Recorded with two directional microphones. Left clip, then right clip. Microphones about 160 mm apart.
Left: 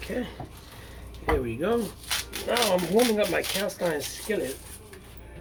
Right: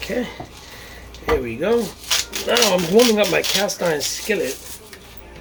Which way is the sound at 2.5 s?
40° right (ahead or behind).